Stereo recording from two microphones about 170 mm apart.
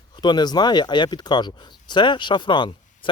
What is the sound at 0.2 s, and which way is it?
Speech, 25° left (ahead or behind).